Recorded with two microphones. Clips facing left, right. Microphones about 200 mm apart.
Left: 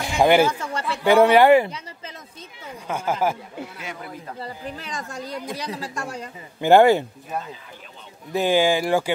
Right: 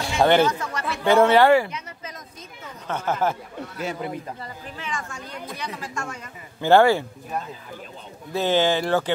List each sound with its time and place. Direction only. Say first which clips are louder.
0.0 s a sound: left 1 dB; 15° left (ahead or behind)
0.5 s chatter: even; 30° left (ahead or behind)
1.0 s speech: left 2 dB; 15° left (ahead or behind)
2.9 s speech: left 1 dB; 10° left (ahead or behind)
4.4 s speech: left 4 dB; 35° left (ahead or behind)
6.6 s speech: left 2 dB; 15° left (ahead or behind)
8.3 s speech: left 2 dB; 15° left (ahead or behind)